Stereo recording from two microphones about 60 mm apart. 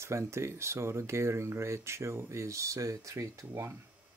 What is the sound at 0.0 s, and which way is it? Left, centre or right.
Speech, right.